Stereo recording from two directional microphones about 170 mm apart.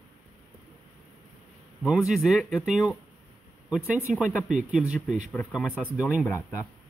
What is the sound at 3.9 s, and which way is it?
Speech, 5° right (ahead or behind).